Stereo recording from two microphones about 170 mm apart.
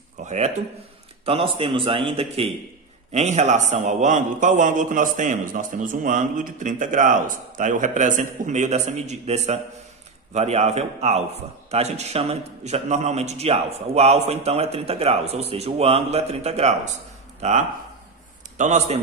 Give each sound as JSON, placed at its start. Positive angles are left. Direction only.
{"t": 0.2, "sound": "speech", "side_deg": -45}
{"t": 1.2, "sound": "a man's voice", "side_deg": -35}